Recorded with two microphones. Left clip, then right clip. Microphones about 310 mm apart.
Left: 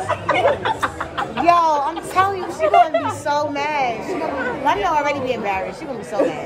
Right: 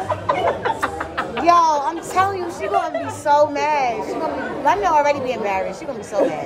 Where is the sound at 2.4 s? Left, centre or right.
Centre.